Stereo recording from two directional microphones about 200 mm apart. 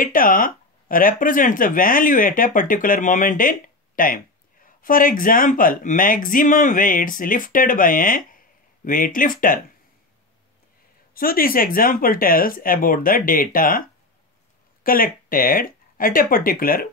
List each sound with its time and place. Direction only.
0.0 s speech: 45° left (ahead or behind)
11.1 s speech: 45° left (ahead or behind)